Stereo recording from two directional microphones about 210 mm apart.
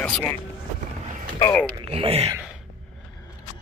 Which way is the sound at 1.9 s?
30° right (ahead or behind).